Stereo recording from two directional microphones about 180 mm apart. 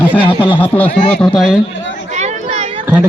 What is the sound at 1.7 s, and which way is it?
Chatter, 90° left.